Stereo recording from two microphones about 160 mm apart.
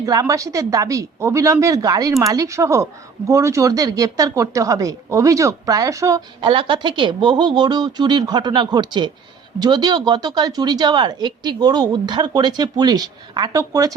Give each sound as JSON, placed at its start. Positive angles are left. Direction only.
{"t": 0.0, "sound": "speech", "side_deg": -20}
{"t": 6.5, "sound": "speech", "side_deg": -30}